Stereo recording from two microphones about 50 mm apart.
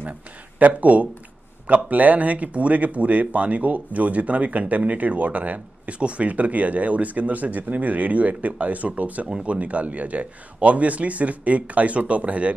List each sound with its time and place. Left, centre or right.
0.6 s speech: right